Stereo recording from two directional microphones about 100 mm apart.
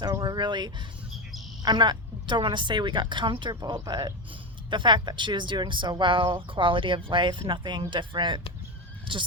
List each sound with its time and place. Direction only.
0.2 s speech: 45° right (ahead or behind)